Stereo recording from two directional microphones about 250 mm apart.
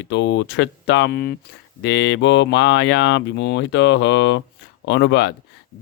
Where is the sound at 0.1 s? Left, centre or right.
Left.